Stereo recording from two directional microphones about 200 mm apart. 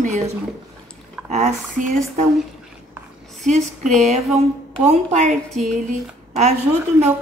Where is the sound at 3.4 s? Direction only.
35° right (ahead or behind).